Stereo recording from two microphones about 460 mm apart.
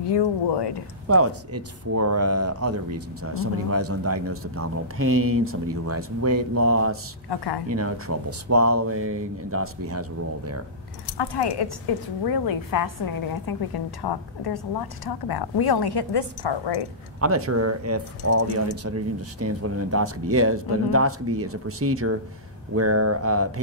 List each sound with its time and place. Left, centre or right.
0.0 s speech: left
1.0 s speech: right
7.2 s speech: left
7.6 s speech: right
11.1 s speech: left
12.3 s a woman's voice: left
17.2 s speech: right